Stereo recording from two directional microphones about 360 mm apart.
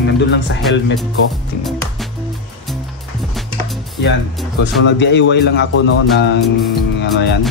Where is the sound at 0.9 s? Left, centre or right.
Centre.